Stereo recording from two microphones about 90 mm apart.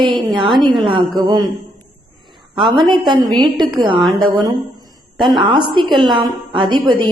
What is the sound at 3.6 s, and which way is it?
A woman's voice, 60° right (ahead or behind).